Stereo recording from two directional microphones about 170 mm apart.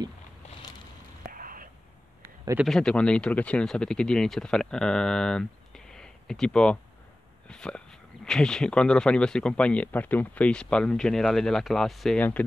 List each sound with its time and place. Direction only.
1.3 s whispering: 55° right (ahead or behind)
2.2 s a sound: 15° right (ahead or behind)
2.6 s speech: 5° left (ahead or behind)